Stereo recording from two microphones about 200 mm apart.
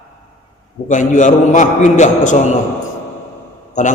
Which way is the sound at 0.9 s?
40° left (ahead or behind).